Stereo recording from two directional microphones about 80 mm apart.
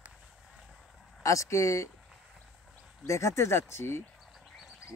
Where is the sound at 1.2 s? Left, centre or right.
Left.